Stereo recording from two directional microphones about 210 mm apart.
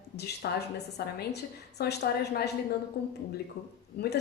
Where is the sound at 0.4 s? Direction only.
50° left (ahead or behind).